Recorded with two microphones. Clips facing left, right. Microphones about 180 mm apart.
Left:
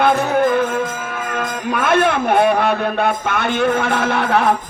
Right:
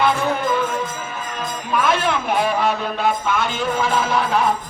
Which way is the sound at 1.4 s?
60° left (ahead or behind).